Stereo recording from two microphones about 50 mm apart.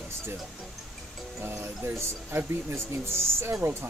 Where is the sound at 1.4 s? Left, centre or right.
Right.